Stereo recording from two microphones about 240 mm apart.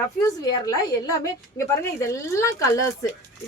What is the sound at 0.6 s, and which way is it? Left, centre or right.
A woman's voice, centre.